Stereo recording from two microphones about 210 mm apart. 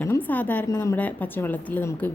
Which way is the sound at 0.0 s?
10° left (ahead or behind).